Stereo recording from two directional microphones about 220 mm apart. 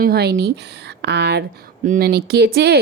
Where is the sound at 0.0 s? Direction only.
45° right (ahead or behind).